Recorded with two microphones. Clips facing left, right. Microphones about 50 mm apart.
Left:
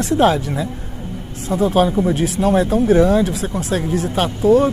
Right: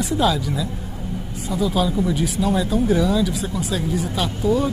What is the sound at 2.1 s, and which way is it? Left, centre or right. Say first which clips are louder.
Speech: left 3 dB; left.